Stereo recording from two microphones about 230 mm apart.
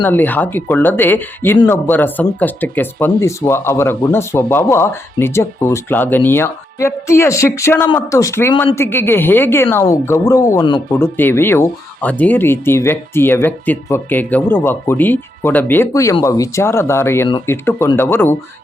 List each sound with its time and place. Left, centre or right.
0.0 s speech: centre
10.9 s speech: centre